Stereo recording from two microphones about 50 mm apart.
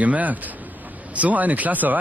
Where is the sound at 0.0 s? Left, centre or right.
Right.